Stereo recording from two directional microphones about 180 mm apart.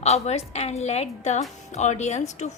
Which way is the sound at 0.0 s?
35° left (ahead or behind).